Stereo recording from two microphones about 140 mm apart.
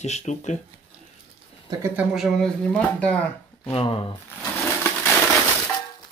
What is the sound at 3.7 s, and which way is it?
Speech, 40° left (ahead or behind).